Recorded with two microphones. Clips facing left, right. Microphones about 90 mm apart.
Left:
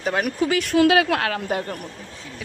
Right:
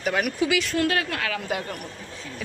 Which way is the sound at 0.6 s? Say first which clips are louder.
Left 7 dB; 65° left (ahead or behind).